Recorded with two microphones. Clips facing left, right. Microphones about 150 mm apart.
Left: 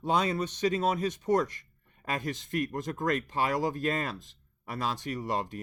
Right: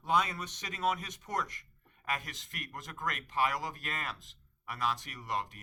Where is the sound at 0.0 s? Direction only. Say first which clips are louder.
Left 4 dB; 30° left (ahead or behind).